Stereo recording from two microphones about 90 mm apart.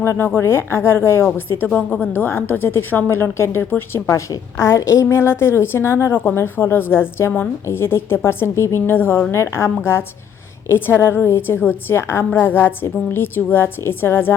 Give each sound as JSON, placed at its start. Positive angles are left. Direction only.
{"t": 0.0, "sound": "a woman's voice", "side_deg": 25}
{"t": 1.5, "sound": "a woman's voice", "side_deg": 15}